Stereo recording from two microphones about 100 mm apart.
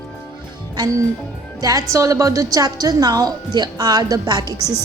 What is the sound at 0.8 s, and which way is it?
Speech, 45° right (ahead or behind).